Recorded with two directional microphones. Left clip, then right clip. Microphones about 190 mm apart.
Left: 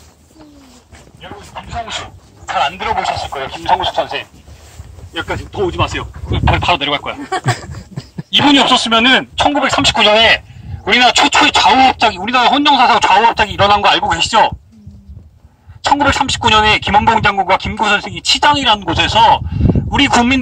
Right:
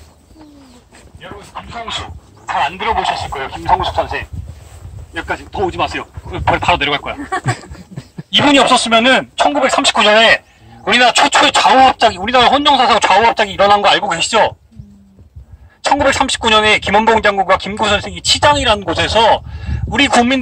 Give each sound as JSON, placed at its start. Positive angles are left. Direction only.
{"t": 1.5, "sound": "speech", "side_deg": 45}
{"t": 2.5, "sound": "speech", "side_deg": 30}
{"t": 3.3, "sound": "speech", "side_deg": 5}
{"t": 5.6, "sound": "speech", "side_deg": 0}
{"t": 7.2, "sound": "speech", "side_deg": 50}
{"t": 7.4, "sound": "laughter", "side_deg": 15}
{"t": 8.3, "sound": "speech", "side_deg": -15}
{"t": 16.0, "sound": "speech", "side_deg": -20}